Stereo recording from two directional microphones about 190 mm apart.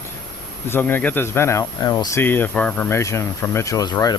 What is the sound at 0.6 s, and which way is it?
Speech, 10° left (ahead or behind).